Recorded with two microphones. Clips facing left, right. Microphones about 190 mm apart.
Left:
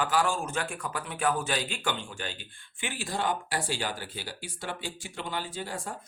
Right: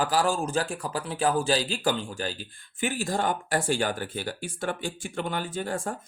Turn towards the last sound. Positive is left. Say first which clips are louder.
# right 6 dB
turn(degrees=-50)  # may be behind; listen again after turning